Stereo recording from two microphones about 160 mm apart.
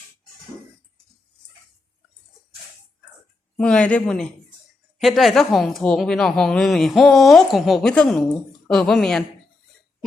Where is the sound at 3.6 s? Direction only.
5° left (ahead or behind).